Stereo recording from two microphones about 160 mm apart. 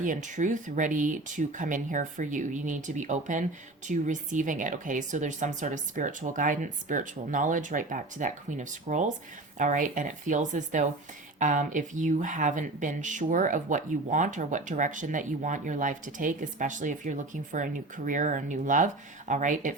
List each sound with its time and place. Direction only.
0.0 s speech: 55° right (ahead or behind)